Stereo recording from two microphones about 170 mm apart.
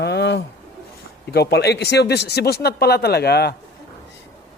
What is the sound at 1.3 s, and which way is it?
Speech, 75° left (ahead or behind).